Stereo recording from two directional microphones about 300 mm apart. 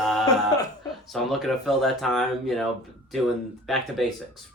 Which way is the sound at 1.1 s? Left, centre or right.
Centre.